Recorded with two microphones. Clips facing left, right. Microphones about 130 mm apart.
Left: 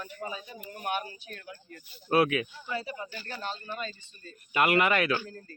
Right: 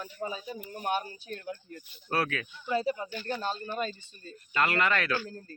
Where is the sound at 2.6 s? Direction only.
30° right (ahead or behind).